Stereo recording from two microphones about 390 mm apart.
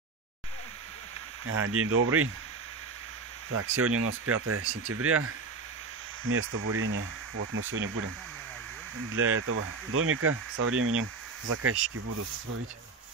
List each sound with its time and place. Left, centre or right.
1.4 s speech: right
3.4 s speech: right
9.1 s speech: right